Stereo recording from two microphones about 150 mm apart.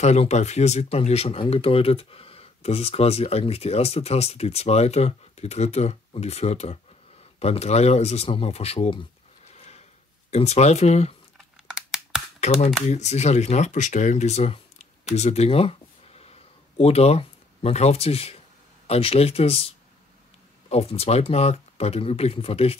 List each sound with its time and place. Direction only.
0.0 s speech: 50° left (ahead or behind)
9.5 s a sound: 45° left (ahead or behind)
10.3 s speech: 45° left (ahead or behind)
11.3 s crumpling: centre (ahead or behind)
12.4 s speech: 45° left (ahead or behind)
15.1 s a sound: 45° left (ahead or behind)
18.9 s speech: 40° left (ahead or behind)